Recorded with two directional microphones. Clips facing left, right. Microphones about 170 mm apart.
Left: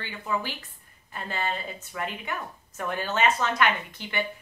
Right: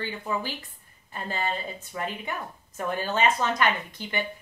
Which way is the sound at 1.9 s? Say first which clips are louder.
Right 1 dB; 30° right (ahead or behind).